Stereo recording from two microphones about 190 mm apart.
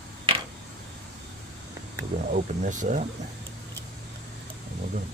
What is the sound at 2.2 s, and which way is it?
Speech, 40° right (ahead or behind).